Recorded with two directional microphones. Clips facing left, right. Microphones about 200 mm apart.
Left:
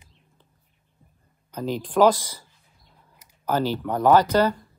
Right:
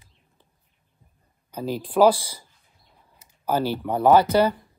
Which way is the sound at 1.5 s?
10° right (ahead or behind).